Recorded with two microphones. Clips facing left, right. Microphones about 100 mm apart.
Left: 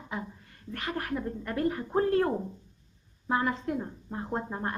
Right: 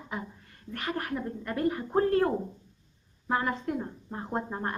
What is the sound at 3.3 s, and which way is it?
Speech, centre (ahead or behind).